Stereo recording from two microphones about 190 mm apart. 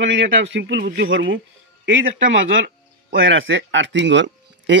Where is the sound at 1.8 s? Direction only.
75° right (ahead or behind).